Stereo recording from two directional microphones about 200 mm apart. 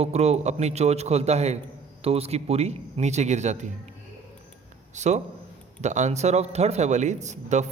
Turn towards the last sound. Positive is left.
turn(degrees=-35)  # may be behind; listen again after turning